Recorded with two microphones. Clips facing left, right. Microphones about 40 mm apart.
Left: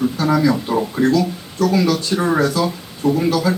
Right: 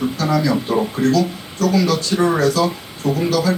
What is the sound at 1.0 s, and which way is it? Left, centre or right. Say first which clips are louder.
Speech: left 1 dB; left.